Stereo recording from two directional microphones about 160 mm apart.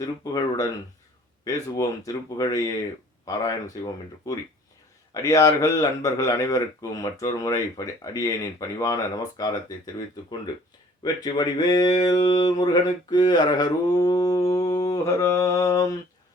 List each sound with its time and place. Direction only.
0.3 s speech: 20° left (ahead or behind)